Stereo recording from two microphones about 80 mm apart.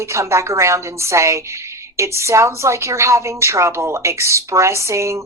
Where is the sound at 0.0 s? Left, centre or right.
Right.